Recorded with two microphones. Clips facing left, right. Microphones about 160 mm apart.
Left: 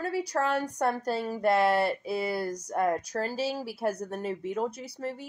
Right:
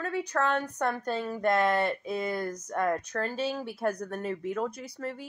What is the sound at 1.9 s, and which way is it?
Speech, 10° left (ahead or behind).